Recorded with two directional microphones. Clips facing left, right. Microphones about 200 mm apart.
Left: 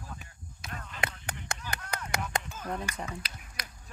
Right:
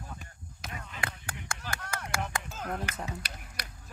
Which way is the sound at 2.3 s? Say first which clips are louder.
Left 3 dB; 20° left (ahead or behind).